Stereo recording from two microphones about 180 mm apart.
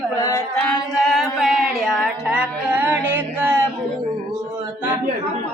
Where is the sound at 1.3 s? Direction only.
Centre (ahead or behind).